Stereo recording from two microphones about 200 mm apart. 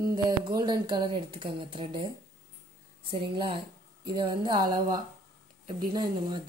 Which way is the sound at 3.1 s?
25° right (ahead or behind).